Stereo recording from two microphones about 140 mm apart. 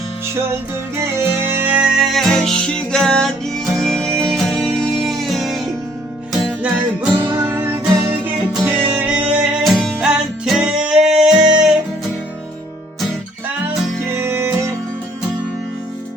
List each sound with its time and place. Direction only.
0.9 s music: 20° right (ahead or behind); by 7.1 s 5° right (ahead or behind)
7.2 s music: 15° right (ahead or behind)
8.6 s music: 10° right (ahead or behind)
14.2 s music: 20° right (ahead or behind)